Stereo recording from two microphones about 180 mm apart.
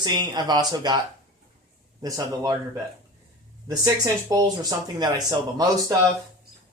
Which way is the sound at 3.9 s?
20° right (ahead or behind).